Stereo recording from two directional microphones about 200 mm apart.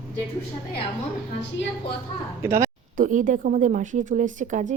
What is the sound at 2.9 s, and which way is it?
Speech, 40° right (ahead or behind).